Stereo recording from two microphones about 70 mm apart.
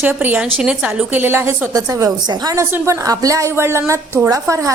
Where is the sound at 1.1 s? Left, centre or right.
Right.